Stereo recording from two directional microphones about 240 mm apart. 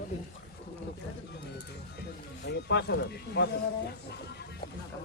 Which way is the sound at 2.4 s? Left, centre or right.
Left.